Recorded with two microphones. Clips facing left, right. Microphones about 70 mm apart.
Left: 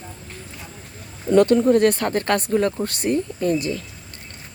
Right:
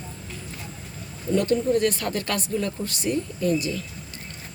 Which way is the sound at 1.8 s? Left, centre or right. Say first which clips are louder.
Left 6 dB; left.